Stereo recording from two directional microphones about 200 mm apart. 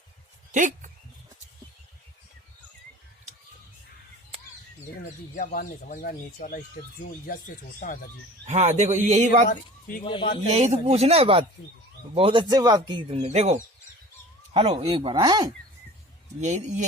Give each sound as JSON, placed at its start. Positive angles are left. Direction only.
{"t": 0.5, "sound": "speech", "side_deg": -40}
{"t": 5.3, "sound": "speech", "side_deg": 45}
{"t": 7.8, "sound": "speech", "side_deg": 50}
{"t": 8.4, "sound": "speech", "side_deg": -35}
{"t": 9.5, "sound": "speech", "side_deg": 40}
{"t": 10.0, "sound": "a man's voice", "side_deg": 25}
{"t": 10.5, "sound": "speech", "side_deg": -35}
{"t": 16.4, "sound": "speech", "side_deg": -35}